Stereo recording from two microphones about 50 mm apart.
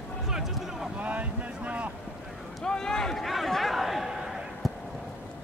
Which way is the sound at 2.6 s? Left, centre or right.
Centre.